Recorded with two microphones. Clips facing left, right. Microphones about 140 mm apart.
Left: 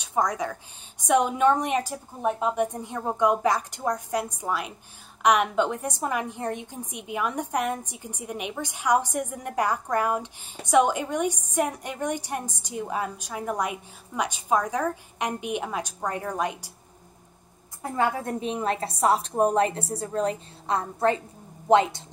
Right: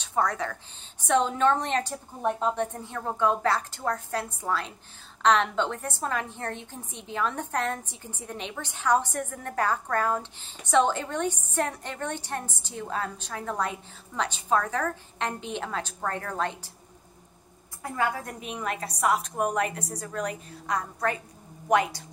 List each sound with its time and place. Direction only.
0.0 s a woman's voice: 15° left (ahead or behind)
17.9 s a woman's voice: 25° left (ahead or behind)